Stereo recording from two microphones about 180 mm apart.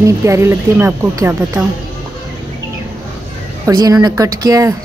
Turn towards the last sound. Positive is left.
turn(degrees=-20)  # may be behind; listen again after turning